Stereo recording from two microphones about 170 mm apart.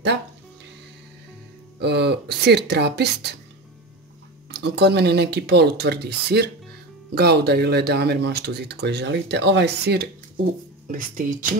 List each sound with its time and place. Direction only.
1.8 s speech: 80° right
4.5 s speech: 75° right (ahead or behind)
10.9 s speech: 50° right (ahead or behind)